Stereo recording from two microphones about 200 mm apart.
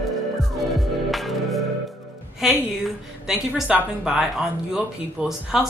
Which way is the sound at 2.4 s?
Centre (ahead or behind).